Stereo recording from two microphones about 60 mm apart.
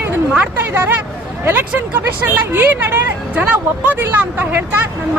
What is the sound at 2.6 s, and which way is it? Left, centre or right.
Speech, right.